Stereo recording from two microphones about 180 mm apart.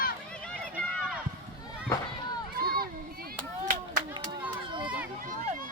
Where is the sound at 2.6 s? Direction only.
55° right (ahead or behind).